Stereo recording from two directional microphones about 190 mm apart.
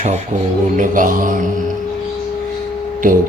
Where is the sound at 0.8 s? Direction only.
45° right (ahead or behind).